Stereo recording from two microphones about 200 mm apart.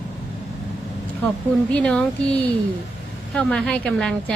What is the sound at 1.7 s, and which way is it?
A woman's voice, 5° left (ahead or behind).